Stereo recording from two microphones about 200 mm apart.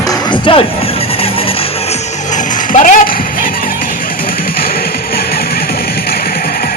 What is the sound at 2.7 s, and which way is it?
Music, 40° left (ahead or behind).